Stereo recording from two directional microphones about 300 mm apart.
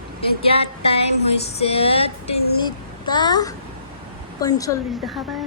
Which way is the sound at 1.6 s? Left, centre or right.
Centre.